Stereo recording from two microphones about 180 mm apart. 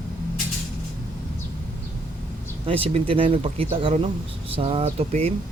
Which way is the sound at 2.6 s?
30° right (ahead or behind).